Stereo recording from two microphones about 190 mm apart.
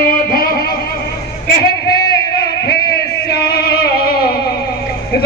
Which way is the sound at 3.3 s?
55° left (ahead or behind).